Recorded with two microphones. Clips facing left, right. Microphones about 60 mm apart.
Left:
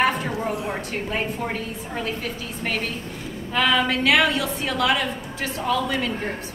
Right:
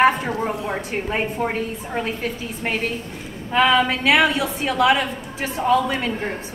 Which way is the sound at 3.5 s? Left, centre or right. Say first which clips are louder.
Right 4 dB; centre.